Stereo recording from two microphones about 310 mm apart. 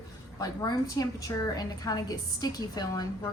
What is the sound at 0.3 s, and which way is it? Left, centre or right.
A woman's voice, centre.